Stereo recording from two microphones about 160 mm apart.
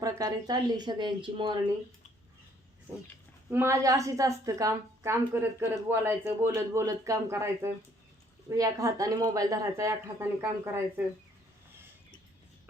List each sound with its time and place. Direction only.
0.0 s speech: 20° right (ahead or behind)
3.5 s a woman's voice: 15° right (ahead or behind)